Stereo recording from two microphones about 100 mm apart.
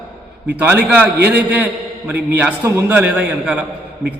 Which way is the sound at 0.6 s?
15° right (ahead or behind).